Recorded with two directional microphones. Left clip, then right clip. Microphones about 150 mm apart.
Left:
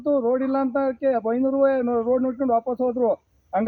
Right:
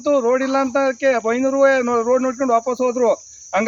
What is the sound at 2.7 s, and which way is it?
Cricket, 20° right (ahead or behind).